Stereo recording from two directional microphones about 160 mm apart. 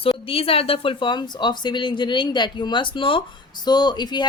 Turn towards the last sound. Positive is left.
turn(degrees=25)  # may be behind; listen again after turning